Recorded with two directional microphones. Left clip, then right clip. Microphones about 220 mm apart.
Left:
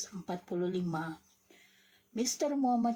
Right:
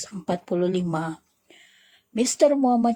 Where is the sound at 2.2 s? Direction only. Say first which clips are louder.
Right 13 dB; 40° right (ahead or behind).